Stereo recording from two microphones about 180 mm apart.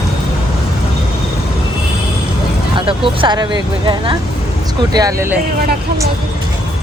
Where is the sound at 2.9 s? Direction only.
30° right (ahead or behind).